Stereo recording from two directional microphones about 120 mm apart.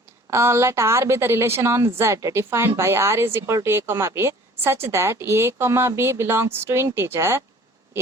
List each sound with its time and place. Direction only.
0.3 s a woman's voice: 25° right (ahead or behind)